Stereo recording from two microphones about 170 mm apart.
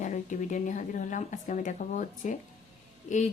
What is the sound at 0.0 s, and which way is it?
Speech, 45° left (ahead or behind).